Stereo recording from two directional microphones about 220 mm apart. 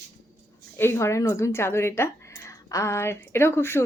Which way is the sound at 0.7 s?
10° left (ahead or behind).